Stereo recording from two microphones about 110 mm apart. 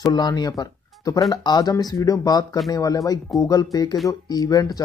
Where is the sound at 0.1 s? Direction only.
35° left (ahead or behind).